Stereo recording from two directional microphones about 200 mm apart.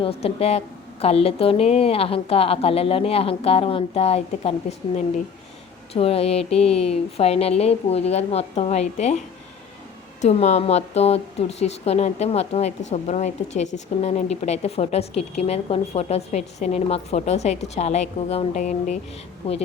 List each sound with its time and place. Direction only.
0.0 s a woman's voice: 30° left (ahead or behind)
5.9 s a woman's voice: 30° left (ahead or behind)
10.2 s a woman's voice: 35° left (ahead or behind)